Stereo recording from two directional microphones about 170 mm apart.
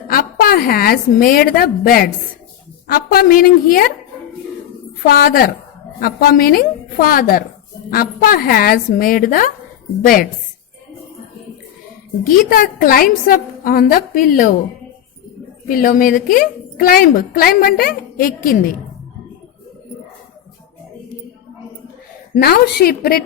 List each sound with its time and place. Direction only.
0.1 s a woman's voice: 60° left (ahead or behind)
5.0 s a woman's voice: 60° left (ahead or behind)
12.5 s a woman's voice: 60° left (ahead or behind)
15.7 s a woman's voice: 50° left (ahead or behind)
22.4 s a woman's voice: 65° left (ahead or behind)